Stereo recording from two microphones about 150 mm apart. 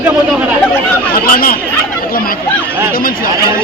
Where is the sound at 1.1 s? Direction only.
75° left (ahead or behind).